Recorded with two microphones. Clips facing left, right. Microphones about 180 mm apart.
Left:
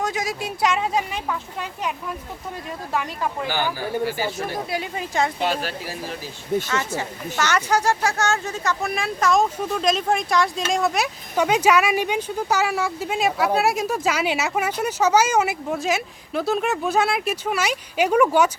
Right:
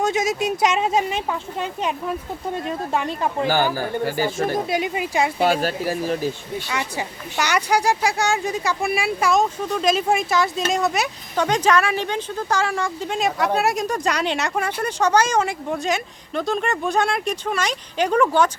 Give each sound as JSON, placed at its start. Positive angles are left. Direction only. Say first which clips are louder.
{"t": 0.0, "sound": "speech", "louder": "right 5 dB", "side_deg": -25}
{"t": 3.4, "sound": "speech", "louder": "right 7 dB", "side_deg": -45}
{"t": 4.7, "sound": "speech", "louder": "right 4 dB", "side_deg": -15}
{"t": 5.6, "sound": "speech", "louder": "right 7 dB", "side_deg": -50}
{"t": 6.7, "sound": "speech", "louder": "left 1 dB", "side_deg": -15}